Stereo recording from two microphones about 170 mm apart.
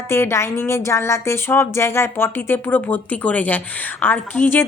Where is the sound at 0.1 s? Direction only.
15° left (ahead or behind).